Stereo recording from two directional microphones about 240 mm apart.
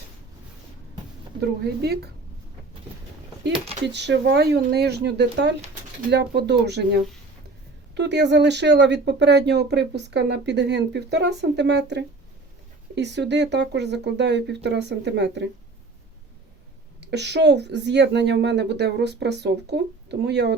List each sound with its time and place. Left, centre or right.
1.4 s speech: right
3.8 s speech: right
17.1 s speech: right